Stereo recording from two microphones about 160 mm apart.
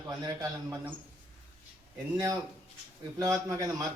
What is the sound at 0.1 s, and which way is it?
Speech, 20° right (ahead or behind).